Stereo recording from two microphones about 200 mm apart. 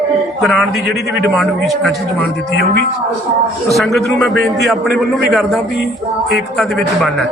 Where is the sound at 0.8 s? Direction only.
50° right (ahead or behind).